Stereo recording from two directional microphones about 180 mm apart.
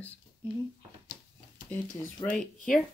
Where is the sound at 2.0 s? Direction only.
5° left (ahead or behind).